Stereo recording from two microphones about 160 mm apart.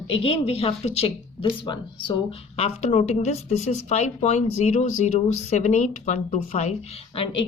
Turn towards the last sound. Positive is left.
turn(degrees=35)  # may be behind; listen again after turning